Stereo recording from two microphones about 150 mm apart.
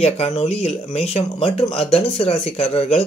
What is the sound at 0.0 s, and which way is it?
Speech, 45° left (ahead or behind).